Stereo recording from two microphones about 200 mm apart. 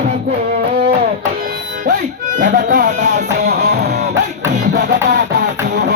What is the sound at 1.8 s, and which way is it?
Music, 40° right (ahead or behind).